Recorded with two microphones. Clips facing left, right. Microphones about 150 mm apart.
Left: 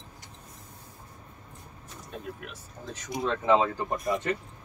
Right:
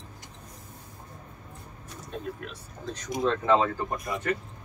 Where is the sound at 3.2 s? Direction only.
15° left (ahead or behind).